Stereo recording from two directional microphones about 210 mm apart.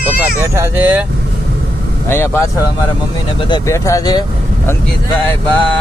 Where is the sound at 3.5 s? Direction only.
15° left (ahead or behind).